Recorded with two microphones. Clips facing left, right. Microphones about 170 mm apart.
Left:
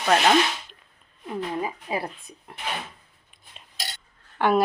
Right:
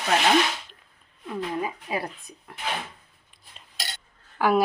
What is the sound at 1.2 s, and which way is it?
Speech, 25° left (ahead or behind).